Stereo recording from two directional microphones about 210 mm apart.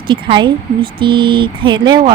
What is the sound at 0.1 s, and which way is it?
Speech, 20° right (ahead or behind).